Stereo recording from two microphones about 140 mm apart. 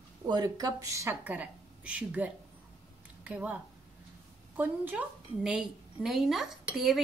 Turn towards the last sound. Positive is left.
turn(degrees=0)  # may be behind; listen again after turning